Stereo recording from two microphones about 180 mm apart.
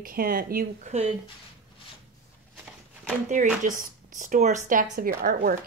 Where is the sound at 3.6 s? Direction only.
45° right (ahead or behind).